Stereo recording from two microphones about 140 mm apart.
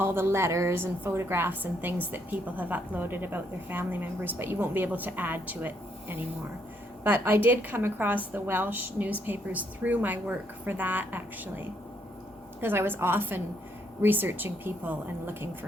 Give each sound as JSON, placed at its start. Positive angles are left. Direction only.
{"t": 0.0, "sound": "a woman's voice", "side_deg": -15}